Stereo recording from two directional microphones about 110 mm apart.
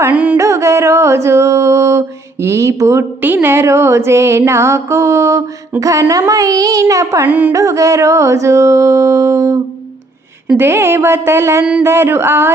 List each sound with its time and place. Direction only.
0.0 s music: 15° right (ahead or behind)
0.3 s music: 25° right (ahead or behind)
5.8 s speech: 30° right (ahead or behind)
7.3 s music: 15° right (ahead or behind)
7.5 s music: 30° right (ahead or behind)
10.6 s music: 20° right (ahead or behind)